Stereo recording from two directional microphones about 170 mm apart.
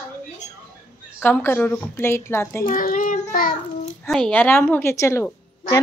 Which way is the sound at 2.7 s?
55° left (ahead or behind).